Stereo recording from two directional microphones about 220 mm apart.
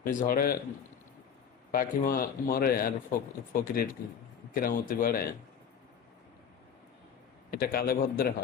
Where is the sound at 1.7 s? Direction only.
40° left (ahead or behind).